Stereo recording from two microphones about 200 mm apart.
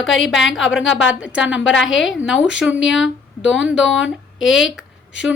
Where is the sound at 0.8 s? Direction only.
70° left (ahead or behind).